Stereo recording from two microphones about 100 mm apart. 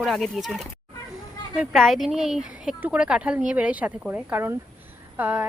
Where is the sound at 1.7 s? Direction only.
Centre (ahead or behind).